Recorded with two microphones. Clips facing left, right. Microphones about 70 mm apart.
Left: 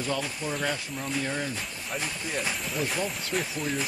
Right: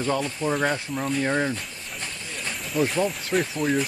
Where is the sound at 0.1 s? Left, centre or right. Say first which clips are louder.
Right 7 dB; right.